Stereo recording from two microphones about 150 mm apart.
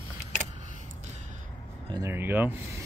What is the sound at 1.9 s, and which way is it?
Speech, 20° right (ahead or behind).